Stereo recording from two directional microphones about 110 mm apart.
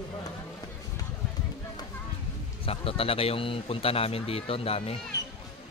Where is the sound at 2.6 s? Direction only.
55° left (ahead or behind).